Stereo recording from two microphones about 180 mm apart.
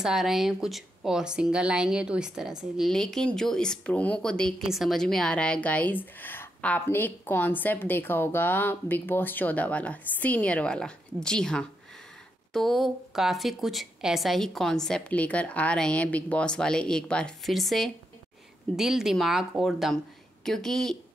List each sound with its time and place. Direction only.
0.0 s speech: centre (ahead or behind)